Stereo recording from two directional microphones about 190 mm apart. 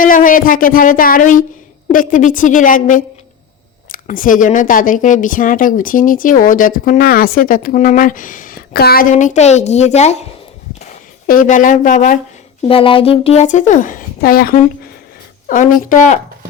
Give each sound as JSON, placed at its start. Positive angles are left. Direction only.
{"t": 0.0, "sound": "a woman's voice", "side_deg": 45}
{"t": 11.3, "sound": "a woman's voice", "side_deg": 45}
{"t": 12.6, "sound": "a woman's voice", "side_deg": 30}